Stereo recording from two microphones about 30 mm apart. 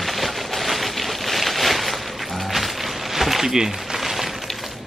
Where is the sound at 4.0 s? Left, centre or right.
Centre.